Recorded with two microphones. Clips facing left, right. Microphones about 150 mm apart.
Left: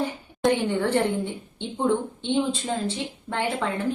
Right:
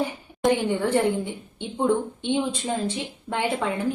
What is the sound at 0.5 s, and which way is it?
A woman's voice, 10° right (ahead or behind).